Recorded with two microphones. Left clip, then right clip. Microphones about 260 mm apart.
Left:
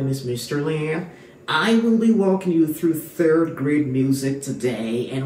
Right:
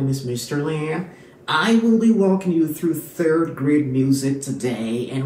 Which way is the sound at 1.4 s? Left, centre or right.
Centre.